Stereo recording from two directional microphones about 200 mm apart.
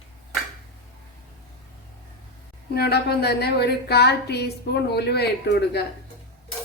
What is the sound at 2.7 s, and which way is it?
A woman's voice, 55° left (ahead or behind).